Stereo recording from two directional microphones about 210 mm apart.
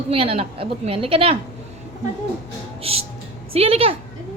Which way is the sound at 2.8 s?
30° right (ahead or behind).